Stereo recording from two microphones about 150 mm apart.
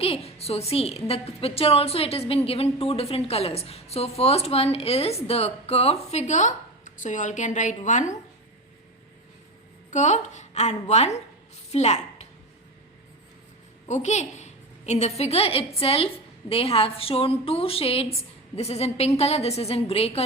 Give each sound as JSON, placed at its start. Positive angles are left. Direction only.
{"t": 0.0, "sound": "a woman's voice", "side_deg": 40}
{"t": 9.9, "sound": "a woman's voice", "side_deg": 50}
{"t": 11.7, "sound": "a sound", "side_deg": 45}
{"t": 13.8, "sound": "a woman's voice", "side_deg": 50}